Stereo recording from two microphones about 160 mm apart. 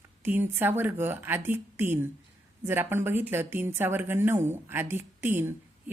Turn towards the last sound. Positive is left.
turn(degrees=-15)  # may be behind; listen again after turning